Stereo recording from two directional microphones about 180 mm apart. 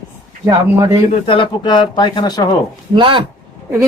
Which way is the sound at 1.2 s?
30° left (ahead or behind).